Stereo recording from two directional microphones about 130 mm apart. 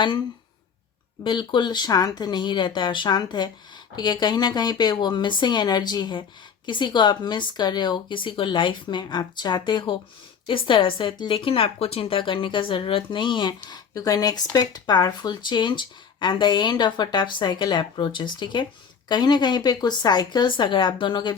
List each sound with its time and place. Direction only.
1.2 s speech: 40° left (ahead or behind)